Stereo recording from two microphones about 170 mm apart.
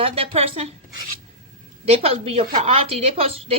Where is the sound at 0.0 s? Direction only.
35° right (ahead or behind).